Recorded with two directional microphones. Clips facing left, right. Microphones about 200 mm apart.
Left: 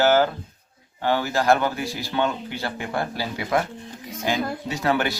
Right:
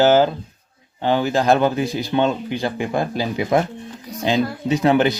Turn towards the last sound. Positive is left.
turn(degrees=-20)  # may be behind; listen again after turning